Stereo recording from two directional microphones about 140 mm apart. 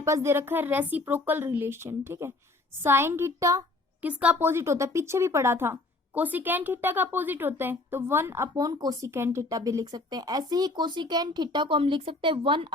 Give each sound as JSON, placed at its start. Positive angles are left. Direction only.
{"t": 0.0, "sound": "speech", "side_deg": -20}
{"t": 4.0, "sound": "speech", "side_deg": -10}